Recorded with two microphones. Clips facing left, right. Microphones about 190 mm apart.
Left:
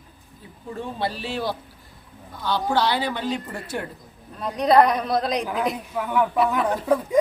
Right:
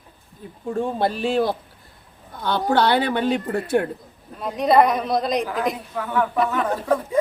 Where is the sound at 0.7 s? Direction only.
50° right (ahead or behind).